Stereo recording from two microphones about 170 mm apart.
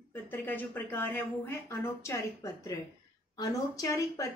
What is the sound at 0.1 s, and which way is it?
A woman's voice, 10° left (ahead or behind).